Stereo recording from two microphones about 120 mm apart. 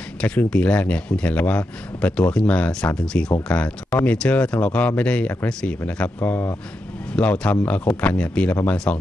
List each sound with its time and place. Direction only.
0.2 s speech: 10° left (ahead or behind)